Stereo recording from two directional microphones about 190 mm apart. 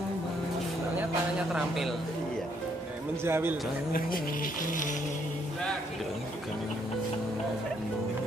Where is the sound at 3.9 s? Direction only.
50° left (ahead or behind).